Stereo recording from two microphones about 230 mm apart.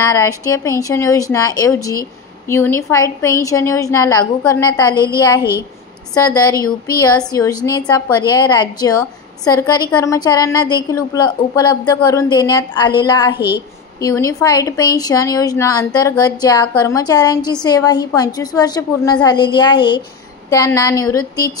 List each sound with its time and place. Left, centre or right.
0.0 s a woman's voice: centre
6.1 s a woman's voice: centre